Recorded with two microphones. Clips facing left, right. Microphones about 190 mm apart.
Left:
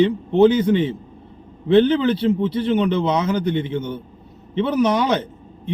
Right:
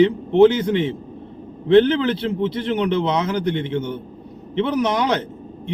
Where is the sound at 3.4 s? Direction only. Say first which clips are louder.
Left 1 dB; 80° right.